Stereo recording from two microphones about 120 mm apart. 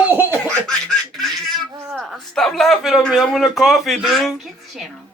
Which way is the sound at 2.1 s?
5° left (ahead or behind).